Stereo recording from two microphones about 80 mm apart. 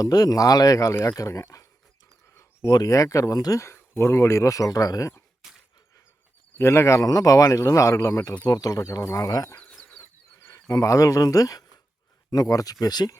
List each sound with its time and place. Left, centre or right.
0.0 s speech: left
2.3 s a sound: left
2.6 s speech: left
3.6 s speech: left
5.4 s a sound: centre
6.6 s speech: left
8.4 s speech: left
10.0 s a sound: left
12.3 s speech: left